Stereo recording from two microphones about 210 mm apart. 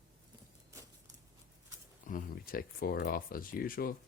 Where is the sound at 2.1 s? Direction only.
45° left (ahead or behind).